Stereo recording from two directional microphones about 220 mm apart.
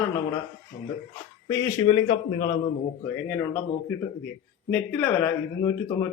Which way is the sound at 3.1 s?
5° left (ahead or behind).